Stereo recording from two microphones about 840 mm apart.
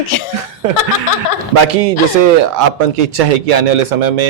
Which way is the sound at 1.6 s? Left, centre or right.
Right.